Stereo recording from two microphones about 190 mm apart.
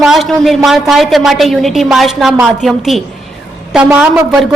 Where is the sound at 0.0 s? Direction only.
Centre (ahead or behind).